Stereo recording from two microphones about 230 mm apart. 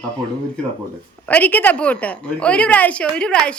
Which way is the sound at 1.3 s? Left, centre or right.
Centre.